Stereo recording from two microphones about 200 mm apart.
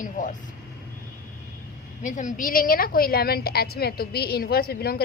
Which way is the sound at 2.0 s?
40° left (ahead or behind).